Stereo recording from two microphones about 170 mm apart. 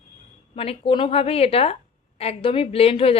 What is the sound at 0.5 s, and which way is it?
A woman's voice, 30° left (ahead or behind).